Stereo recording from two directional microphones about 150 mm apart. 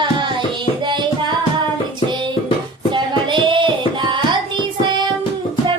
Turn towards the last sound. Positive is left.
turn(degrees=-30)  # may be behind; listen again after turning